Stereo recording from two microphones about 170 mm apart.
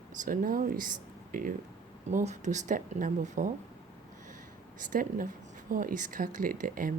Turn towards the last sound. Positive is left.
turn(degrees=-55)  # may be behind; listen again after turning